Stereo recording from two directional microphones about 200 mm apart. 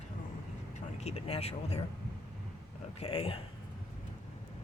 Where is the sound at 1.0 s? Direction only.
30° left (ahead or behind).